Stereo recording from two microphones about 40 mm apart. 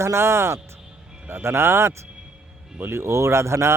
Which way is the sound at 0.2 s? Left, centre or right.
Right.